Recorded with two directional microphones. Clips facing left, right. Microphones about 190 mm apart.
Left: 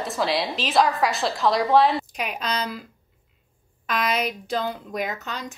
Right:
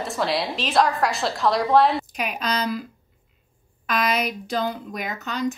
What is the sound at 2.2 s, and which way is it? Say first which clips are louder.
Speech: right 2 dB; 30° left (ahead or behind).